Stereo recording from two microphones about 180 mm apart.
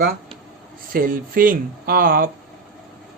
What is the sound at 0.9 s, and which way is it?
Speech, 50° right (ahead or behind).